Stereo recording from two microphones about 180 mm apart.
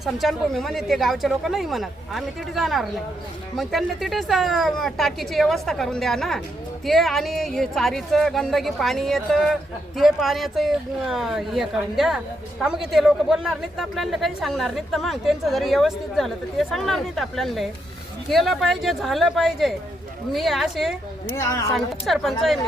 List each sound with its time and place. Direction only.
0.0 s speech: centre (ahead or behind)
21.3 s speech: 15° left (ahead or behind)
21.8 s speech: centre (ahead or behind)